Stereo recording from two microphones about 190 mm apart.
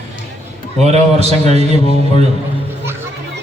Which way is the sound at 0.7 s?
35° right (ahead or behind).